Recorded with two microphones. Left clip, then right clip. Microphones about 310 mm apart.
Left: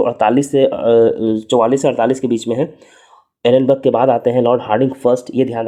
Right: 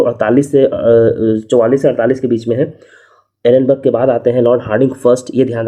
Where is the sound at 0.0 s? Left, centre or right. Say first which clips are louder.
Right 2 dB; centre.